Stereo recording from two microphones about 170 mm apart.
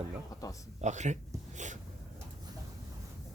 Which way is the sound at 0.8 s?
45° right (ahead or behind).